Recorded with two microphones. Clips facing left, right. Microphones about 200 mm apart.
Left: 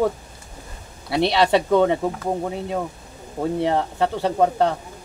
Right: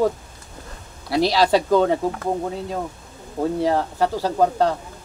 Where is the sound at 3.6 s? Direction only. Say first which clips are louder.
Even; 25° left (ahead or behind).